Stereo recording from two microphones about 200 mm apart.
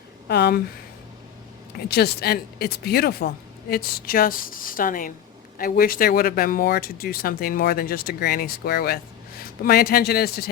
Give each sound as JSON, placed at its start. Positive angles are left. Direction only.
{"t": 0.3, "sound": "speech", "side_deg": 55}
{"t": 1.9, "sound": "speech", "side_deg": 55}